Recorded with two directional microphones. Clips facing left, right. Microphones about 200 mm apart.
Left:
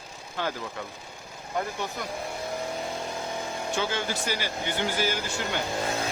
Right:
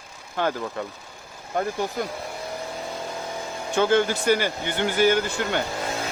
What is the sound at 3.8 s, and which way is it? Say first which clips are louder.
Speech: right 11 dB; 55° right (ahead or behind).